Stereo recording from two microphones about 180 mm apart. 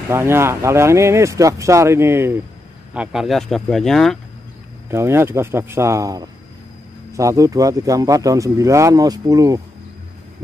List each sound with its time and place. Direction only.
0.1 s speech: 15° right (ahead or behind); by 4.2 s centre (ahead or behind)
4.9 s a man's voice: 15° right (ahead or behind)